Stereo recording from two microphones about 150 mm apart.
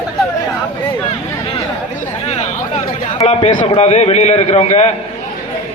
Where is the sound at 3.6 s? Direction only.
40° left (ahead or behind).